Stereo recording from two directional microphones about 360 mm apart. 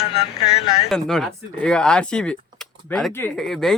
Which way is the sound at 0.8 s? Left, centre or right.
Centre.